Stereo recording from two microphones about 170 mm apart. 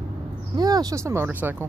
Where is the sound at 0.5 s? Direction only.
25° right (ahead or behind).